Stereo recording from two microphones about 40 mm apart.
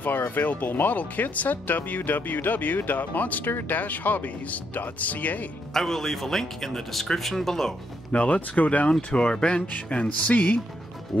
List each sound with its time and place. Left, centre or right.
0.3 s speech: left
5.7 s speech: centre
8.1 s music: left
9.1 s speech: left
9.8 s music: left